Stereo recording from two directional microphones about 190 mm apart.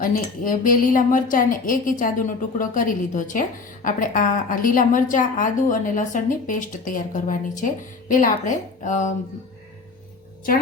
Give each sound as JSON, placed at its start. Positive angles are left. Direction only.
{"t": 0.0, "sound": "a woman's voice", "side_deg": 45}